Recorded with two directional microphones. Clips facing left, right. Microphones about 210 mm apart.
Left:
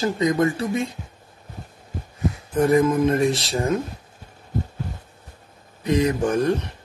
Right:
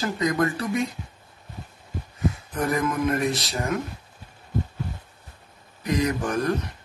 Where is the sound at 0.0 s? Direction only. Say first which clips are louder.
Left 4 dB; 25° left (ahead or behind).